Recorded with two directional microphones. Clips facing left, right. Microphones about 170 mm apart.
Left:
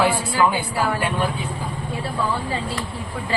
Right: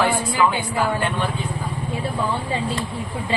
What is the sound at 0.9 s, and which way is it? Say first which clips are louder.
Speech: left 1 dB; 5° left (ahead or behind).